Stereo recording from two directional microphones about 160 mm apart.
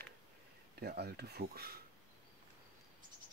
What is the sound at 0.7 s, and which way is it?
Speech, 85° right.